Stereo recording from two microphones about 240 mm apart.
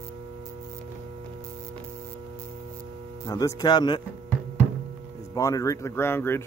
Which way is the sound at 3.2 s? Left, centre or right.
Centre.